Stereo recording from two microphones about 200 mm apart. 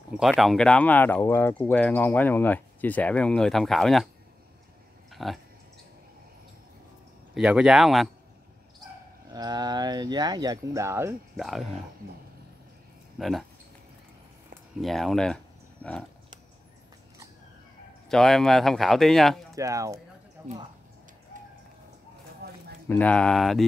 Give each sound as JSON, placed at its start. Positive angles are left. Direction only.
{"t": 0.1, "sound": "speech", "side_deg": 0}
{"t": 5.1, "sound": "a sound", "side_deg": 0}
{"t": 7.3, "sound": "a man's voice", "side_deg": -5}
{"t": 9.3, "sound": "speech", "side_deg": -20}
{"t": 11.3, "sound": "a man's voice", "side_deg": 0}
{"t": 13.2, "sound": "a man's voice", "side_deg": 0}
{"t": 14.8, "sound": "speech", "side_deg": 0}
{"t": 18.0, "sound": "a man's voice", "side_deg": 0}
{"t": 19.5, "sound": "speech", "side_deg": -15}
{"t": 20.4, "sound": "a sound", "side_deg": -15}
{"t": 22.4, "sound": "a sound", "side_deg": -55}
{"t": 22.8, "sound": "a man's voice", "side_deg": 10}